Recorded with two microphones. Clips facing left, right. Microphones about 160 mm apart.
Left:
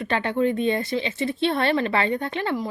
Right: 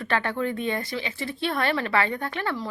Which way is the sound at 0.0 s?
20° left (ahead or behind).